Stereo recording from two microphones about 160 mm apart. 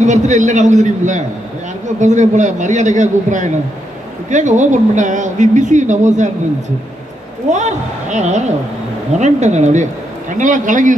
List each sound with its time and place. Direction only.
0.0 s speech: 45° right (ahead or behind)
7.4 s speech: 50° right (ahead or behind)